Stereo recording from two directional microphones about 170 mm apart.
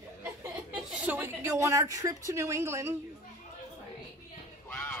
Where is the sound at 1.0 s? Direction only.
10° right (ahead or behind).